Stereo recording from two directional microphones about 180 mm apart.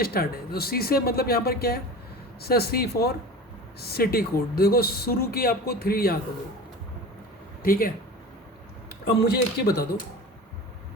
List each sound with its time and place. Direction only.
0.0 s speech: 55° left (ahead or behind)
7.6 s speech: 50° left (ahead or behind)
9.0 s speech: 60° left (ahead or behind)